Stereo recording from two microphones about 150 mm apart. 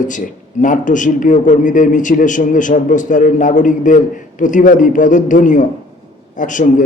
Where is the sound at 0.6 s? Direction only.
60° left (ahead or behind).